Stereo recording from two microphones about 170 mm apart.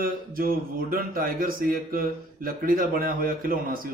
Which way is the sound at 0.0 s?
60° right (ahead or behind).